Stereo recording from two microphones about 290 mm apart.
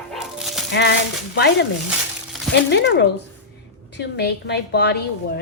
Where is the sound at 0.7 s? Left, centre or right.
Left.